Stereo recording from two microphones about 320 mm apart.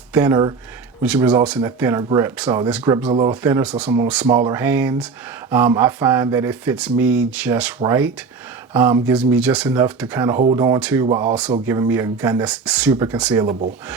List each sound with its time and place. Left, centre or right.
0.1 s speech: centre